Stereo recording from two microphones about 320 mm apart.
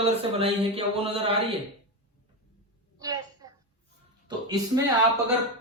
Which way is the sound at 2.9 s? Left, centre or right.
Centre.